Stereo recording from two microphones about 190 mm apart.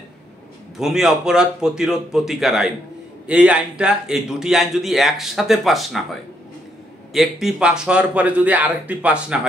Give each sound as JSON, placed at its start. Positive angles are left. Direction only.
{"t": 0.7, "sound": "a man's voice", "side_deg": 0}
{"t": 7.1, "sound": "a man's voice", "side_deg": 0}